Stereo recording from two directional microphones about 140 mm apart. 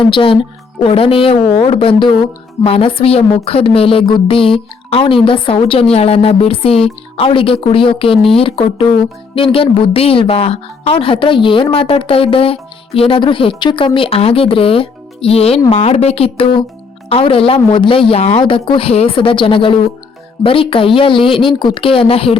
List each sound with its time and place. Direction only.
0.1 s a woman's voice: 40° left (ahead or behind)